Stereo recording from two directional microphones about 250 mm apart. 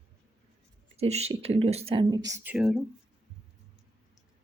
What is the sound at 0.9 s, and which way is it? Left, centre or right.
Speech, right.